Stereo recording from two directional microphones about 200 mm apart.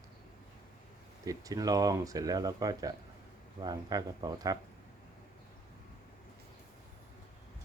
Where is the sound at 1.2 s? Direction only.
15° right (ahead or behind).